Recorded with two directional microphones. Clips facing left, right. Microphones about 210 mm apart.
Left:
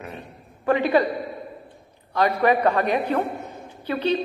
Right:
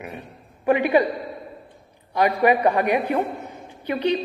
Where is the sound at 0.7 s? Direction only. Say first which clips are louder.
Right 1 dB; 15° right (ahead or behind).